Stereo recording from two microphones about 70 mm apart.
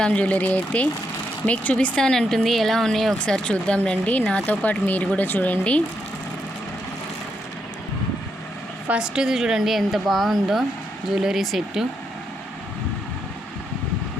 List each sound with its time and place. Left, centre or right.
0.0 s speech: centre
2.0 s a woman's voice: centre
3.2 s speech: centre
4.4 s speech: left
8.9 s a woman's voice: centre